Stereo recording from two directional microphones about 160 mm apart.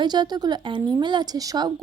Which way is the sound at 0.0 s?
25° right (ahead or behind).